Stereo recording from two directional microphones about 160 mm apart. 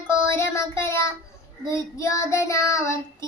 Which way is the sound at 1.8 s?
20° left (ahead or behind).